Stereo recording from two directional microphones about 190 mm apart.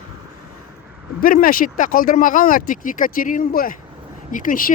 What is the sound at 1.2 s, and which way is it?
Speech, 50° left (ahead or behind).